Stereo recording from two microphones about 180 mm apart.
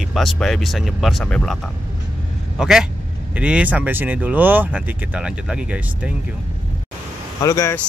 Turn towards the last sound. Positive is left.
turn(degrees=20)  # may be behind; listen again after turning